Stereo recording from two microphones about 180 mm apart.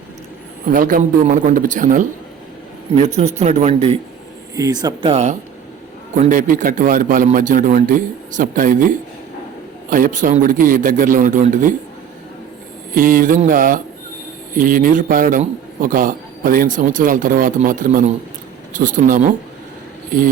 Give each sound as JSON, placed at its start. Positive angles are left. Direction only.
{"t": 0.6, "sound": "a man's voice", "side_deg": -50}
{"t": 3.3, "sound": "speech", "side_deg": -35}
{"t": 4.5, "sound": "speech", "side_deg": -20}
{"t": 5.0, "sound": "a man's voice", "side_deg": -40}
{"t": 9.9, "sound": "a man's voice", "side_deg": -45}
{"t": 12.9, "sound": "a man's voice", "side_deg": -50}